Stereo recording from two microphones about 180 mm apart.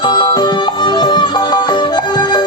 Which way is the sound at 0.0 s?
25° left (ahead or behind).